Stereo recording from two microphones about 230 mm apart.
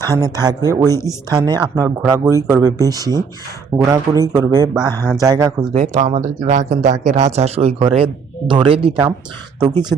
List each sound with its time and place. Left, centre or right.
0.1 s speech: centre
5.7 s speech: right